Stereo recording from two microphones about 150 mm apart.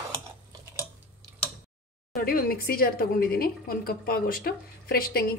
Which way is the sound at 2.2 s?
75° left (ahead or behind).